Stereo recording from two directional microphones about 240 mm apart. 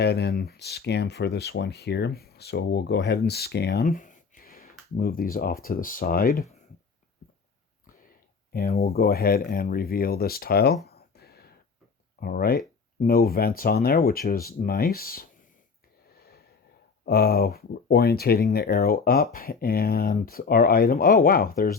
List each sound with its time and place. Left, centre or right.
0.0 s speech: left
8.5 s speech: left
10.8 s a sound: left
12.2 s speech: left
16.1 s a sound: left
17.1 s speech: left